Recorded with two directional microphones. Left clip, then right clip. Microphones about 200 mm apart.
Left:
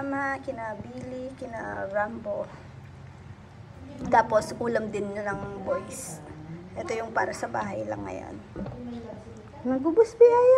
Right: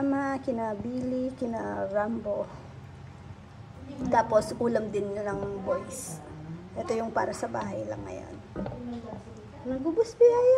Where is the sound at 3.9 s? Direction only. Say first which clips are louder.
Left 2 dB; centre (ahead or behind).